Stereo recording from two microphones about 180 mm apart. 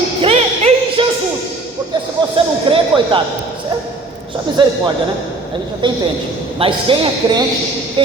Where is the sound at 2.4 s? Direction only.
30° right (ahead or behind).